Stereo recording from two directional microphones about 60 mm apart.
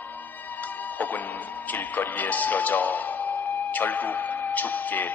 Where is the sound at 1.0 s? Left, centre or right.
Left.